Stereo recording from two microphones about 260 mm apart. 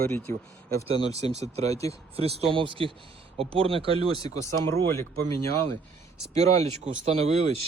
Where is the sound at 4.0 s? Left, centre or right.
Centre.